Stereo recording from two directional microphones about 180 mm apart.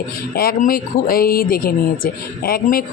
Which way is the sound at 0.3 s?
55° left (ahead or behind).